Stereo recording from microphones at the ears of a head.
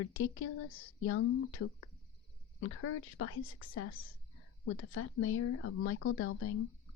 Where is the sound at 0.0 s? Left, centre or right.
Left.